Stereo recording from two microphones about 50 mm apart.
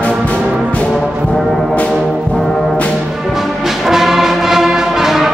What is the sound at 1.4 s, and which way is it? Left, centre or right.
Music, centre.